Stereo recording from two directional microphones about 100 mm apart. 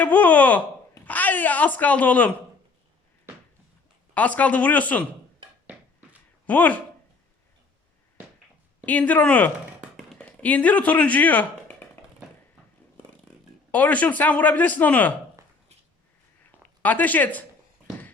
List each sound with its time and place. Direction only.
0.0 s a man's voice: 15° left (ahead or behind)
4.1 s a man's voice: 15° left (ahead or behind)
6.4 s speech: 15° left (ahead or behind)
8.9 s a man's voice: 15° left (ahead or behind)
11.8 s a sound: 20° left (ahead or behind)
13.7 s a man's voice: 15° left (ahead or behind)
16.8 s a man's voice: 15° left (ahead or behind)